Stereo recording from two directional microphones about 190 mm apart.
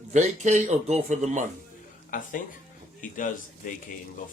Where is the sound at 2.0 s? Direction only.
45° left (ahead or behind).